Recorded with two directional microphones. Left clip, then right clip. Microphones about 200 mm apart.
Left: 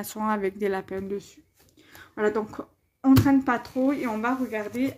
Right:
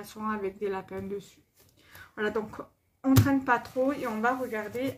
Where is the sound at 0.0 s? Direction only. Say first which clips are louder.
Left 6 dB; 45° left (ahead or behind).